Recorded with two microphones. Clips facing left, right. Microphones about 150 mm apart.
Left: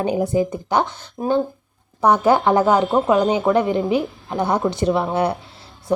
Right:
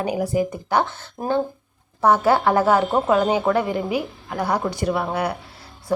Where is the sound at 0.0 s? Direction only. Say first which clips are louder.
Left 3 dB; 25° left (ahead or behind).